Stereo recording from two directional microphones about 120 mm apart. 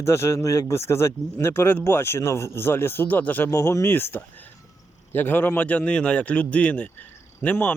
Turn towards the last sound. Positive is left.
turn(degrees=15)  # may be behind; listen again after turning